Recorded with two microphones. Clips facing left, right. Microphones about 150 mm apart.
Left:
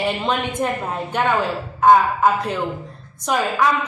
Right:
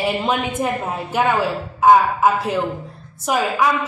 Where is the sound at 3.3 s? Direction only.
10° right (ahead or behind).